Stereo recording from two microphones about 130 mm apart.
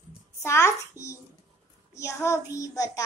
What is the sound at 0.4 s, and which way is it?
A child's voice, 20° left (ahead or behind).